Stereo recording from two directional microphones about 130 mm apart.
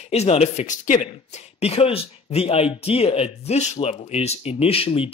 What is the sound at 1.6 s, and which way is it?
Speech, 55° left (ahead or behind).